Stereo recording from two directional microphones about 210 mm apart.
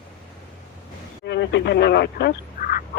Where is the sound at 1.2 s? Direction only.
55° left (ahead or behind).